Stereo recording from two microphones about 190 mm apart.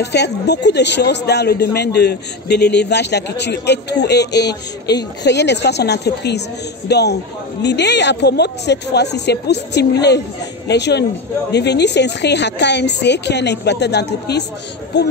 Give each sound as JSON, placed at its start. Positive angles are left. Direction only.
{"t": 0.0, "sound": "speech", "side_deg": 60}